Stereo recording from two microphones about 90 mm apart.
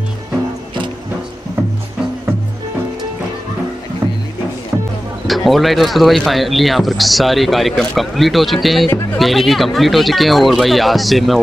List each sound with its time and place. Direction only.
5.2 s speech: centre (ahead or behind)